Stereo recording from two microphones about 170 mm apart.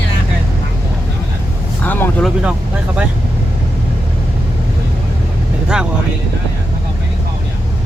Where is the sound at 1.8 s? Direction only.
10° left (ahead or behind).